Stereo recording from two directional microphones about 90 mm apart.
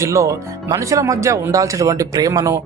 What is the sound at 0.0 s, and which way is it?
Speech, 35° right (ahead or behind).